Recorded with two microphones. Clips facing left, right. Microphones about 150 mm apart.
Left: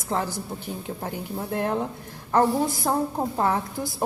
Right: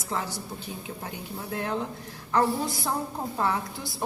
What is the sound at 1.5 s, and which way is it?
A woman's voice, 50° left (ahead or behind).